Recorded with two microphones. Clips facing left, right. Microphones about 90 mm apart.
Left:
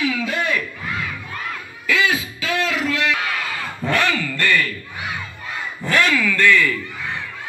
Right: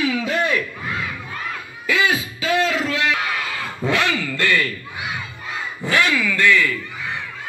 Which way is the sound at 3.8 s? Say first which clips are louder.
Right 1 dB; 5° right (ahead or behind).